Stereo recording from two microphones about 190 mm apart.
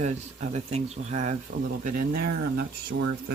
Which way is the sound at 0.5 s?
35° right (ahead or behind).